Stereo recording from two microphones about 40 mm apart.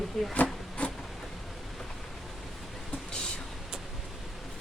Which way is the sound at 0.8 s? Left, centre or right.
Left.